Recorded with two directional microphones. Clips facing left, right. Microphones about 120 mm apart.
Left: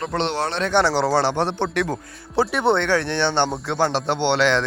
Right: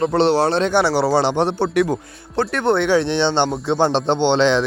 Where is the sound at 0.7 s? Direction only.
10° right (ahead or behind).